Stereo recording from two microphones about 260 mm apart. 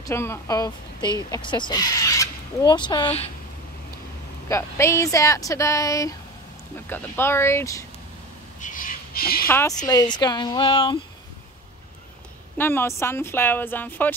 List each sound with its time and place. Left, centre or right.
0.0 s speech: centre
4.5 s speech: centre
8.5 s a sound: left
9.5 s speech: centre
12.5 s speech: centre